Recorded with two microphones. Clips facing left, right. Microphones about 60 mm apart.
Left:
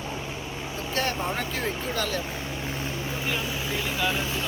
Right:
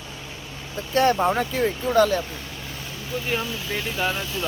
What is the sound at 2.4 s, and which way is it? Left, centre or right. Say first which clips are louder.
Vehicle: left 4 dB; left.